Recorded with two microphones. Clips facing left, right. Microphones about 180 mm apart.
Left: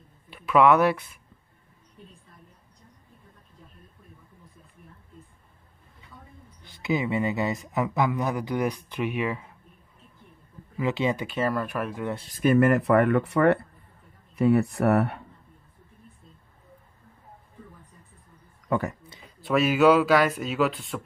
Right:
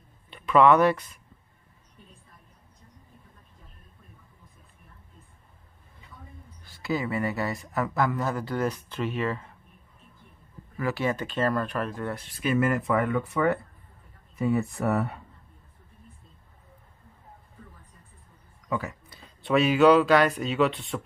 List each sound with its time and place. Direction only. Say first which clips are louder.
0.3 s speech: even; 5° left (ahead or behind)
6.6 s speech: left 2 dB; 20° left (ahead or behind)
10.8 s speech: left 2 dB; 20° left (ahead or behind)
12.3 s speech: left 6 dB; 50° left (ahead or behind); by 15.2 s 70° left (ahead or behind)
18.7 s speech: left 4 dB; 55° left (ahead or behind)
19.4 s speech: even; centre (ahead or behind)